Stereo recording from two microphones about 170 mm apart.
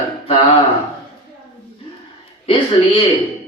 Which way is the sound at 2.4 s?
35° left (ahead or behind).